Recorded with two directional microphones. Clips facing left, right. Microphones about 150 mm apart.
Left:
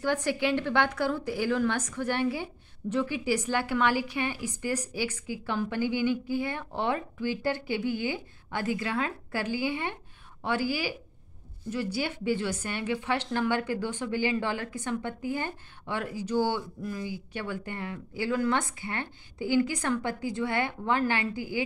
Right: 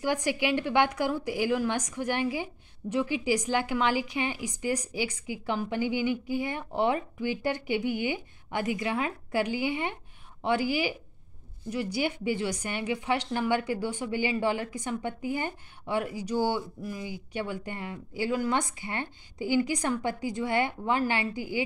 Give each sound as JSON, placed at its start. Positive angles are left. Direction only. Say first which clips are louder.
{"t": 0.0, "sound": "a woman's voice", "louder": "even", "side_deg": -15}